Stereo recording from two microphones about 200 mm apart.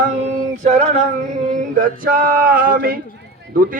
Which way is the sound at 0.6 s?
35° right (ahead or behind).